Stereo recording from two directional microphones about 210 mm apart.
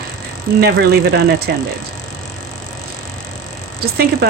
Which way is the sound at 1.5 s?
55° right (ahead or behind).